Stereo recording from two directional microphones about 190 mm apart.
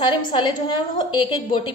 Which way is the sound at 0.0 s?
25° left (ahead or behind).